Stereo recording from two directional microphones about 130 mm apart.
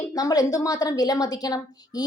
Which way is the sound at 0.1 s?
25° left (ahead or behind).